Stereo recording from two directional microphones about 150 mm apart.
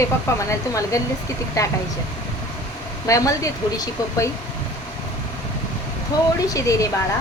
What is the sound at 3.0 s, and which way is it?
Speech, 20° left (ahead or behind).